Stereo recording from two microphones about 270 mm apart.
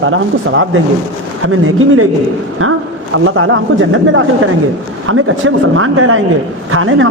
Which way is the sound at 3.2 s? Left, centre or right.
Right.